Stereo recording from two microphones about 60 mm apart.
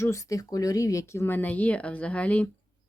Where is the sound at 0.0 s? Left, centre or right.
Left.